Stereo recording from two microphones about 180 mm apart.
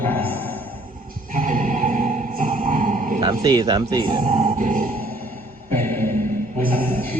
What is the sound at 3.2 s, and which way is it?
Speech, 20° right (ahead or behind).